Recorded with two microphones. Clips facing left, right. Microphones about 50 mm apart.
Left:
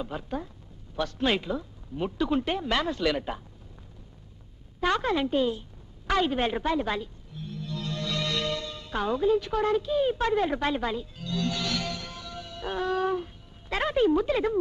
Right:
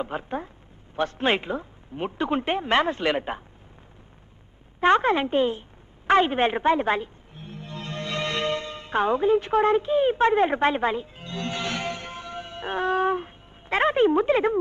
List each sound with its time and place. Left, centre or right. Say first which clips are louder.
0.0 s speech: right 4 dB; right
4.7 s speech: right 6 dB; right
6.0 s music: right 6 dB; right